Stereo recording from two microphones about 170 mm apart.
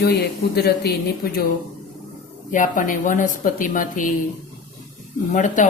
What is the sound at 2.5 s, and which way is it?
A woman's voice, 50° left (ahead or behind).